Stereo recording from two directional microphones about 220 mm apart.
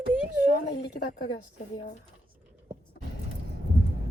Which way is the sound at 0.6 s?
50° left (ahead or behind).